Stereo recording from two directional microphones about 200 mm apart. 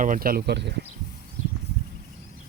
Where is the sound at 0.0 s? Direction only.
45° right (ahead or behind).